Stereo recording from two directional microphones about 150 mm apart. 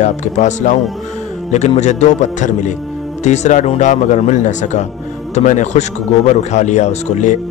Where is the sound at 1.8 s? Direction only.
50° left (ahead or behind).